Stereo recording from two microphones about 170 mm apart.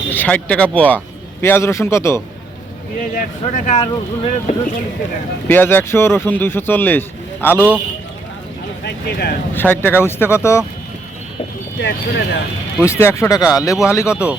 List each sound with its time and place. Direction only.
0.1 s a man's voice: 10° left (ahead or behind)
3.2 s speech: 45° left (ahead or behind)
5.5 s speech: 10° left (ahead or behind)
8.8 s speech: 75° left (ahead or behind)
9.6 s speech: 10° left (ahead or behind)
11.8 s speech: 90° left
12.8 s speech: 15° left (ahead or behind)